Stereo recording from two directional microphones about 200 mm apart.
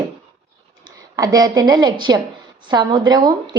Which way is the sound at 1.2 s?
20° right (ahead or behind).